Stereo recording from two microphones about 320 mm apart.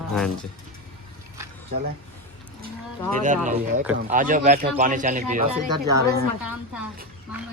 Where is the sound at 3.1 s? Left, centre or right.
Right.